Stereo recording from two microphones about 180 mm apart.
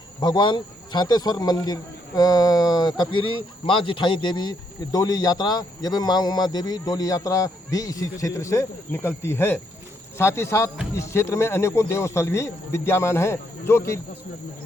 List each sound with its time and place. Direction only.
0.2 s a man's voice: 25° left (ahead or behind)